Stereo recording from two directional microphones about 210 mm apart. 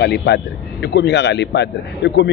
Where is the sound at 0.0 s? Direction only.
55° left (ahead or behind).